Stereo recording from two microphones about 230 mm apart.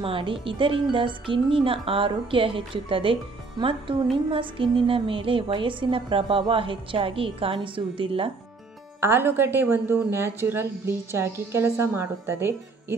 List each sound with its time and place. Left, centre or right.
0.0 s speech: right
9.0 s a woman's voice: centre